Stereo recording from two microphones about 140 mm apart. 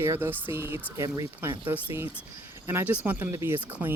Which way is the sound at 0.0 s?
15° right (ahead or behind).